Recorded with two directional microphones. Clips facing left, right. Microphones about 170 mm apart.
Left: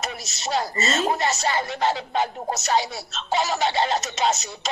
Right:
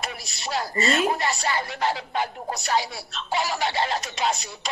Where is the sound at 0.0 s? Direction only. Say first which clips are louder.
Left 3 dB; 20° left (ahead or behind).